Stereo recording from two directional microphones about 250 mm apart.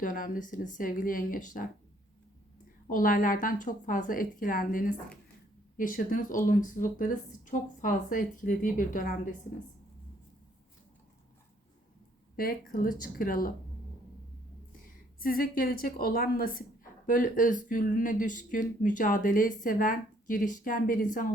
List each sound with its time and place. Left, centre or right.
0.0 s speech: left
2.9 s speech: left
12.4 s speech: left
15.2 s speech: left